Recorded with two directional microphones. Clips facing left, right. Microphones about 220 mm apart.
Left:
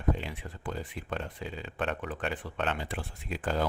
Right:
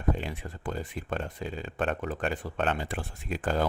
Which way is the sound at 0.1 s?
45° right (ahead or behind).